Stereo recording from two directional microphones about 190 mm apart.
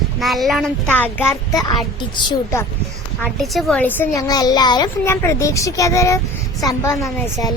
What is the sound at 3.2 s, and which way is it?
A child's voice, centre (ahead or behind).